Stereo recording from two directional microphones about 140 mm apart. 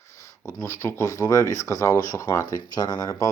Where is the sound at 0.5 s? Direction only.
20° left (ahead or behind).